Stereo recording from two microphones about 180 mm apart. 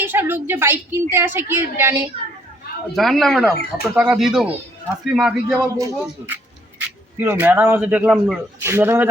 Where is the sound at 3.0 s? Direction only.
Centre (ahead or behind).